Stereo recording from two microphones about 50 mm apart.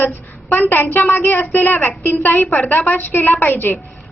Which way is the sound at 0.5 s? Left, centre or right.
Left.